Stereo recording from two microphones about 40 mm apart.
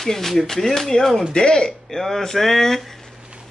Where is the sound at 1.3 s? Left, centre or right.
Left.